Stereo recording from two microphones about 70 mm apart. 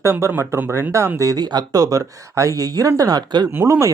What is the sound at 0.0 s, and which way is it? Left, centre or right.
Speech, right.